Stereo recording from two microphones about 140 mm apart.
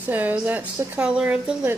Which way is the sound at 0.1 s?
10° right (ahead or behind).